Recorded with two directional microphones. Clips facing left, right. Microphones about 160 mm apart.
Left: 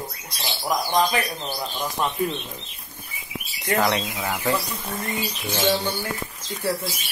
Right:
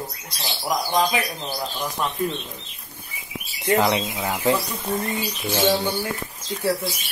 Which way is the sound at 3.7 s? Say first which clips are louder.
Right 3 dB; 15° right (ahead or behind).